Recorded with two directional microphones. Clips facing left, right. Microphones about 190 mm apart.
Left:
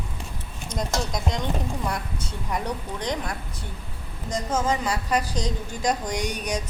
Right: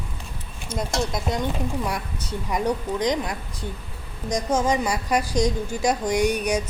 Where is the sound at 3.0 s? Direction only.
15° right (ahead or behind).